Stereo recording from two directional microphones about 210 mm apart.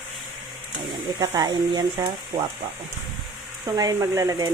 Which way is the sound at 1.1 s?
20° right (ahead or behind).